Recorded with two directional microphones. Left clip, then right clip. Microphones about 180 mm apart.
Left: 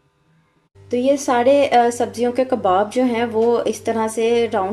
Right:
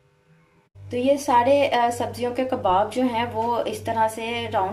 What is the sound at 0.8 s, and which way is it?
Speech, 35° left (ahead or behind).